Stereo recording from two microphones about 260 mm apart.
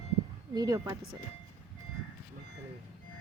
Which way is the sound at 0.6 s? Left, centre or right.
Centre.